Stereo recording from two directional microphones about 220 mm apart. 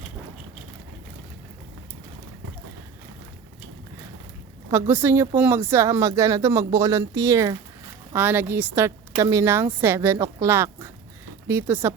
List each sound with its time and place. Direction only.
4.7 s a woman's voice: 10° right (ahead or behind)